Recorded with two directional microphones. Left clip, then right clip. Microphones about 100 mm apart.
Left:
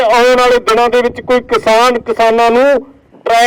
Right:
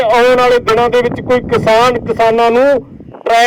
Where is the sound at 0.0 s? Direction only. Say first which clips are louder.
Left 1 dB; 30° left (ahead or behind).